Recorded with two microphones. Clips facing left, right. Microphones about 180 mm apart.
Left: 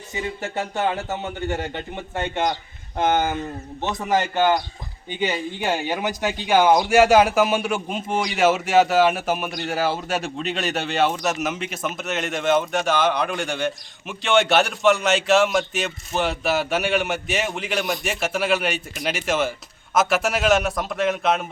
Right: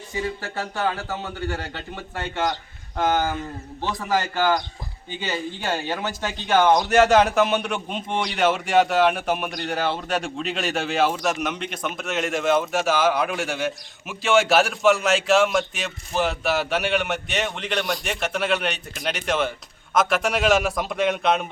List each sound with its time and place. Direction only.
0.1 s speech: 20° left (ahead or behind); by 21.4 s centre (ahead or behind)